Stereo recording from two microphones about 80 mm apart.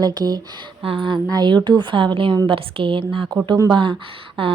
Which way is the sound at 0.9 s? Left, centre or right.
Right.